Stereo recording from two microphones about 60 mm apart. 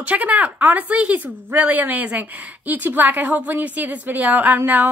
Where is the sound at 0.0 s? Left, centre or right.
Right.